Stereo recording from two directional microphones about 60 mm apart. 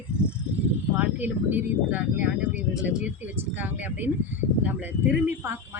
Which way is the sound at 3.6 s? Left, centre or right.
Right.